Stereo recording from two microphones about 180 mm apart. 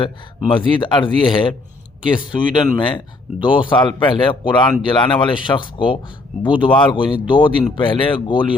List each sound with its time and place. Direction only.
0.0 s speech: 25° left (ahead or behind)